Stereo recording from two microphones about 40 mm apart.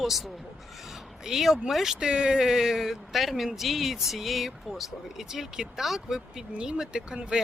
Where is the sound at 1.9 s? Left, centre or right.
Centre.